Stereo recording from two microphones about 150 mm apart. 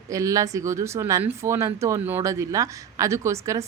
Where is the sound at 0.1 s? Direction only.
20° right (ahead or behind).